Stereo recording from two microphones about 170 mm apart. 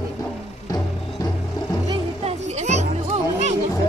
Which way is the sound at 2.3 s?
40° right (ahead or behind).